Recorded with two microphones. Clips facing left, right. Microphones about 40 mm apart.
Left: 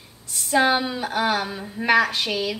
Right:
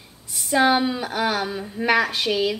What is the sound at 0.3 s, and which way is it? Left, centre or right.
A woman's voice, centre.